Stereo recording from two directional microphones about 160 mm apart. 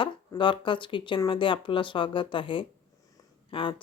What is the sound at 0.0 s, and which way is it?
Speech, 30° left (ahead or behind).